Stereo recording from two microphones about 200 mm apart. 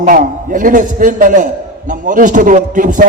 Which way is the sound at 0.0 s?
40° right (ahead or behind).